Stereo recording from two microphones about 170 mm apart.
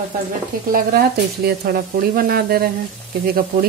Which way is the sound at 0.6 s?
60° right (ahead or behind).